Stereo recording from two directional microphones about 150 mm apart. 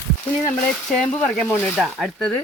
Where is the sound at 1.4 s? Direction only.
10° left (ahead or behind).